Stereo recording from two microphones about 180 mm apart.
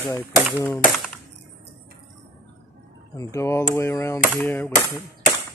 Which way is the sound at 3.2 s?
15° left (ahead or behind).